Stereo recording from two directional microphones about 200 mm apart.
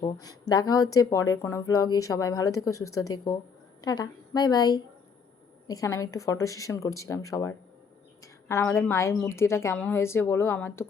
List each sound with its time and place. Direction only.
0.0 s a woman's voice: 20° left (ahead or behind)
8.2 s a sound: 15° left (ahead or behind)
8.9 s speech: 15° left (ahead or behind)